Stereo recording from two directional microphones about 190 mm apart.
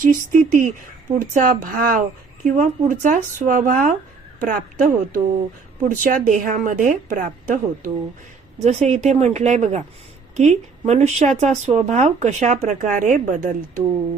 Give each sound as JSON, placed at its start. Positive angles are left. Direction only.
{"t": 0.0, "sound": "a woman's voice", "side_deg": -45}
{"t": 8.5, "sound": "speech", "side_deg": -35}